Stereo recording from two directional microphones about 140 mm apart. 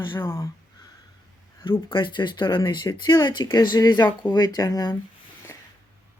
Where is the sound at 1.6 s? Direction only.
35° left (ahead or behind).